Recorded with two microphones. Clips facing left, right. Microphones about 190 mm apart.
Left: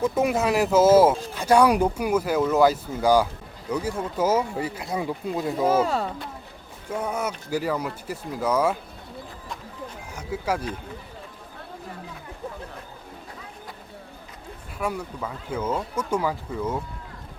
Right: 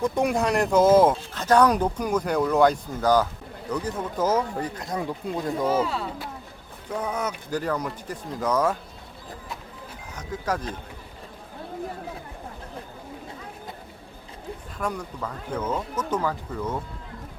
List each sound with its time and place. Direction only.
0.0 s speech: 5° left (ahead or behind)
5.6 s speech: 45° left (ahead or behind)
6.9 s speech: 10° left (ahead or behind)
10.2 s speech: 10° left (ahead or behind)
14.8 s speech: 5° left (ahead or behind)